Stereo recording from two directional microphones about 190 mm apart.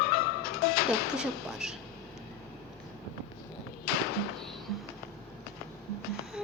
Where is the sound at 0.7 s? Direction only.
50° left (ahead or behind).